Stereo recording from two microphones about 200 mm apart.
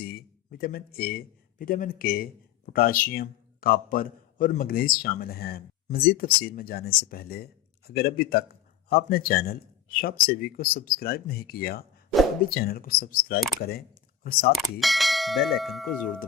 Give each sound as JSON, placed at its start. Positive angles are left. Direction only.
{"t": 0.0, "sound": "speech", "side_deg": 50}
{"t": 14.5, "sound": "bell", "side_deg": 0}